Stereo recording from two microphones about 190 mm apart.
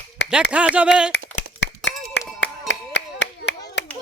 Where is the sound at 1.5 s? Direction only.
70° left (ahead or behind).